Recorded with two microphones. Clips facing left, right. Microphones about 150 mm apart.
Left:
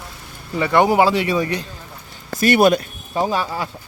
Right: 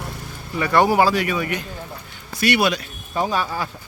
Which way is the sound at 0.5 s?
20° left (ahead or behind).